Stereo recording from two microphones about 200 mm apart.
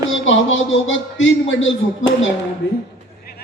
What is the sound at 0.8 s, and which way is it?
Speech, 70° left (ahead or behind).